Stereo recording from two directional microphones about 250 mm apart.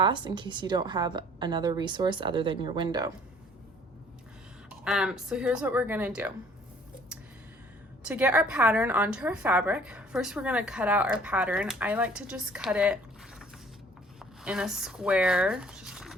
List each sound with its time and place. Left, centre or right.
0.0 s a woman's voice: centre
4.8 s a woman's voice: centre
8.0 s a woman's voice: centre
14.2 s speech: centre